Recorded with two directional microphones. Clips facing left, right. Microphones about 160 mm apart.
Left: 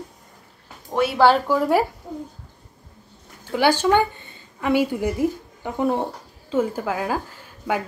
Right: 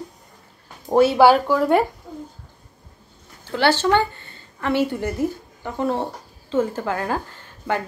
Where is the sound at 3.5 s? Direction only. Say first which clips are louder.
Even; 10° left (ahead or behind).